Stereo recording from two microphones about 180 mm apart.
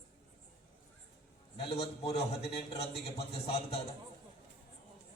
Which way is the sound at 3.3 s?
35° left (ahead or behind).